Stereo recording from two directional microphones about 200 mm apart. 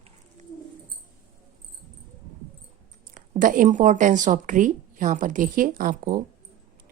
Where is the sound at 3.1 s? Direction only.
40° right (ahead or behind).